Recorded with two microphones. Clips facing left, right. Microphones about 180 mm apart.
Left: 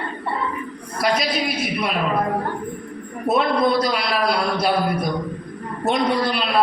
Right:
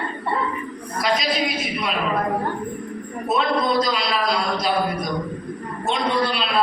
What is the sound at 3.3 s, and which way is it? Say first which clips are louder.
Speech: left 3 dB; 55° left (ahead or behind).